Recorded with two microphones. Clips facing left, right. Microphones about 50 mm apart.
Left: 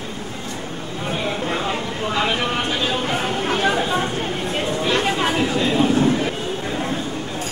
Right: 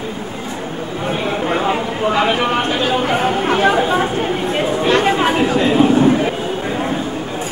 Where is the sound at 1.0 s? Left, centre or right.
Centre.